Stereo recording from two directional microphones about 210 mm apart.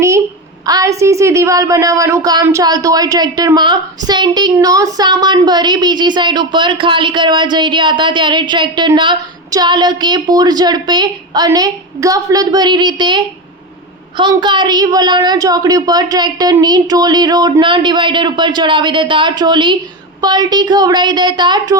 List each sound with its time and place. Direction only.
0.6 s a woman's voice: 15° right (ahead or behind)